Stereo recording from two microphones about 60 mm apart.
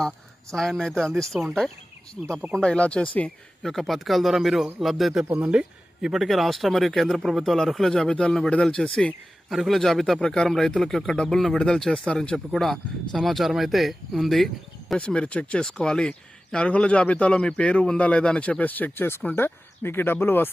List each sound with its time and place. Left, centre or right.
0.5 s speech: centre
2.6 s speech: centre
3.6 s speech: centre
5.5 s speech: centre
8.1 s speech: centre
9.5 s speech: centre
12.5 s speech: centre
14.9 s speech: centre; by 20.5 s left